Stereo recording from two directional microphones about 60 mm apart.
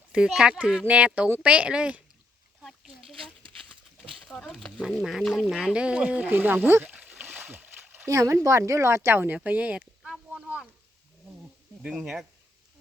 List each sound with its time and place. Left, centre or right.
0.3 s speech: centre
4.2 s a sound: centre
4.4 s speech: centre
4.9 s speech: centre
5.7 s speech: centre
6.2 s speech: right
6.8 s a sound: right
7.2 s splash: right
8.0 s speech: right
9.4 s speech: right
10.1 s a sound: centre
11.8 s speech: centre